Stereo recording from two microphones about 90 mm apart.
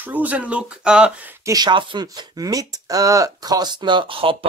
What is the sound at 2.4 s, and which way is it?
Speech, 40° right (ahead or behind).